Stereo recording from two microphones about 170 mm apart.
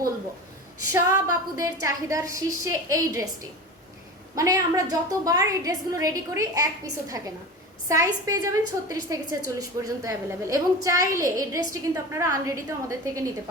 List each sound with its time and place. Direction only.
0.9 s a woman's voice: 15° right (ahead or behind)
4.4 s a woman's voice: 20° right (ahead or behind)
7.9 s a woman's voice: 20° right (ahead or behind)